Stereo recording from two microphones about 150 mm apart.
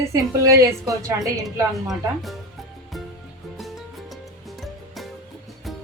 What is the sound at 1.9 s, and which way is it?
Speech, centre (ahead or behind).